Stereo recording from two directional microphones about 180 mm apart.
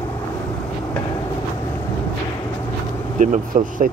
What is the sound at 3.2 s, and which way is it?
Speech, 45° right (ahead or behind).